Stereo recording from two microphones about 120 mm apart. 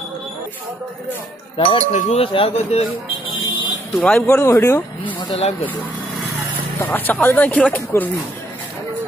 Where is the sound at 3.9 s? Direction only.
10° left (ahead or behind).